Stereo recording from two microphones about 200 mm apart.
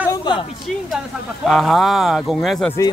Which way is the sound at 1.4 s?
Centre (ahead or behind).